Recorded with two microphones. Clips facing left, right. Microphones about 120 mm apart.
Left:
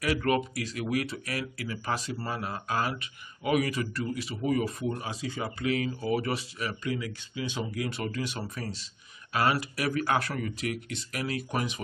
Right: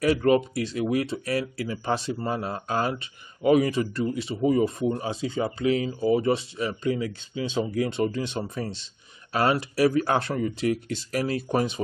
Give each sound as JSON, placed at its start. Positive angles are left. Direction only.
{"t": 0.0, "sound": "speech", "side_deg": -30}